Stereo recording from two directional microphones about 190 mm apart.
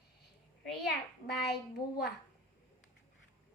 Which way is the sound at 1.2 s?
55° left (ahead or behind).